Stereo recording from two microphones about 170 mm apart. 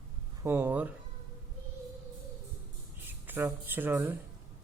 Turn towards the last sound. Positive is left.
turn(degrees=-10)  # may be behind; listen again after turning